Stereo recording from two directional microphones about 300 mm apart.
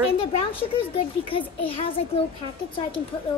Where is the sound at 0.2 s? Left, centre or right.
Centre.